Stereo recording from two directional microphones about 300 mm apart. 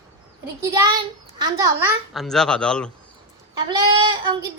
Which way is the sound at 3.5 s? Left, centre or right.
Centre.